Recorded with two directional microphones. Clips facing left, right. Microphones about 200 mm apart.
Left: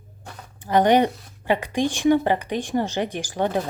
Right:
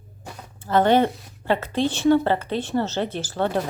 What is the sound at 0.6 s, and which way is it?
Speech, 15° left (ahead or behind).